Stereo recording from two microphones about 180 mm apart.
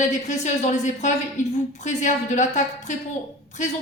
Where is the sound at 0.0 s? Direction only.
40° left (ahead or behind).